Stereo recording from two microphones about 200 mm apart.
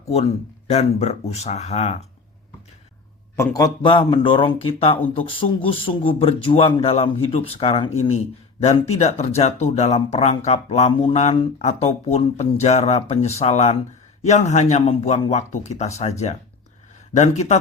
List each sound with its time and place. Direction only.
0.1 s speech: 30° left (ahead or behind)
3.3 s speech: 15° left (ahead or behind); by 17.6 s 35° left (ahead or behind)